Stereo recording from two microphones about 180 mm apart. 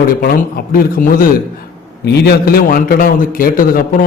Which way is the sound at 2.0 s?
65° left (ahead or behind).